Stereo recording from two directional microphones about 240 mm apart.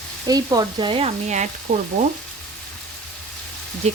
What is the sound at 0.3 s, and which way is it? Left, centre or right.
Frying, centre.